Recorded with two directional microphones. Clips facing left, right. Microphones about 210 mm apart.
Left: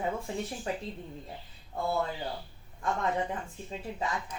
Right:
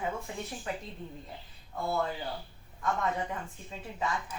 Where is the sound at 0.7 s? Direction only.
30° left (ahead or behind).